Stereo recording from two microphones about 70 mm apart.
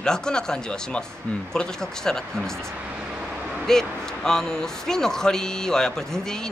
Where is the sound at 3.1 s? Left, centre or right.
Right.